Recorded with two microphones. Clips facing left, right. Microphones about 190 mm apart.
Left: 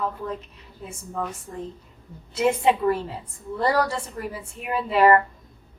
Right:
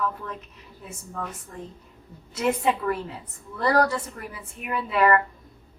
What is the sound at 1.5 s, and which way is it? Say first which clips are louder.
Speech: left 5 dB; 25° left (ahead or behind).